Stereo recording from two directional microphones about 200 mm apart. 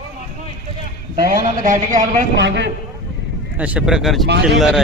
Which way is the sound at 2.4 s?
60° right (ahead or behind).